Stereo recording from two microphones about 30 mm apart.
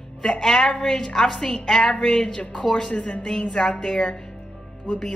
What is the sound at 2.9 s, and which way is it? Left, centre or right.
A woman's voice, left.